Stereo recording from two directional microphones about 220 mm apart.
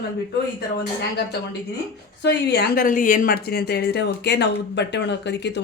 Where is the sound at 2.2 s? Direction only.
50° left (ahead or behind).